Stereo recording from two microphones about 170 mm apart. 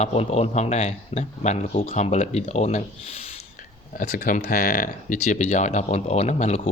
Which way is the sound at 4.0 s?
55° left (ahead or behind).